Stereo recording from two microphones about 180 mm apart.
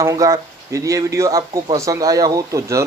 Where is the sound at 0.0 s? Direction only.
15° right (ahead or behind).